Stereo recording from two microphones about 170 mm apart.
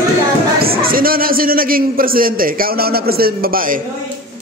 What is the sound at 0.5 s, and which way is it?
A man's voice, 60° right (ahead or behind).